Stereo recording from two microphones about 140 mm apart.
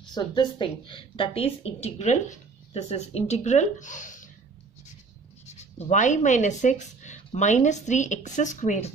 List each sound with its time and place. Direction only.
0.0 s a woman's voice: 30° left (ahead or behind); by 4.3 s 65° left (ahead or behind)
5.9 s a woman's voice: 60° left (ahead or behind)